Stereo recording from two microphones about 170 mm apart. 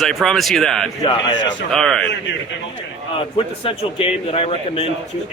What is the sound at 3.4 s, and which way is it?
A man's voice, 35° left (ahead or behind).